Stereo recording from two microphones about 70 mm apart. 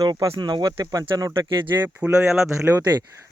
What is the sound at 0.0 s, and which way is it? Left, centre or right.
Speech, right.